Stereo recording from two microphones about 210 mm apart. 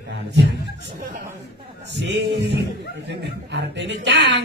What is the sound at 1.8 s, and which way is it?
Speech, 55° right (ahead or behind).